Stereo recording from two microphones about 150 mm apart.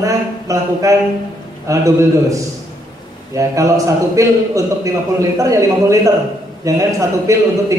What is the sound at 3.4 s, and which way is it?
A man's voice, 20° right (ahead or behind).